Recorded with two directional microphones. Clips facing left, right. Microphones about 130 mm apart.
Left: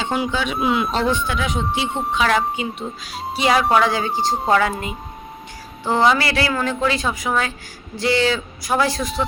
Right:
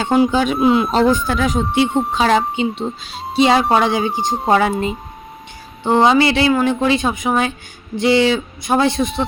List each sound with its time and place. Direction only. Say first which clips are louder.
0.0 s speech: right 7 dB; 45° right (ahead or behind)
2.1 s speech: right 2 dB; 30° right (ahead or behind)